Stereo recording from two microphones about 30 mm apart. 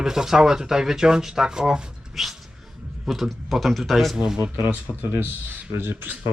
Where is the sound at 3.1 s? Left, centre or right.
Centre.